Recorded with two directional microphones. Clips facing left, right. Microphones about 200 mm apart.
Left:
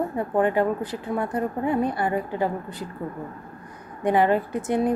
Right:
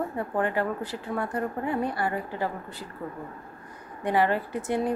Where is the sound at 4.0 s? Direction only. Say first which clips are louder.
Left 4 dB; 20° left (ahead or behind).